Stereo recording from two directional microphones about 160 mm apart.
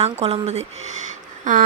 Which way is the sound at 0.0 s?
40° right (ahead or behind).